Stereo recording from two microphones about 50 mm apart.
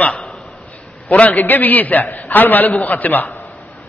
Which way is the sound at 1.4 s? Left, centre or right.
Left.